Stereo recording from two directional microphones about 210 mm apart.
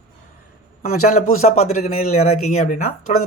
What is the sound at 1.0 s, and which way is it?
Speech, 35° left (ahead or behind).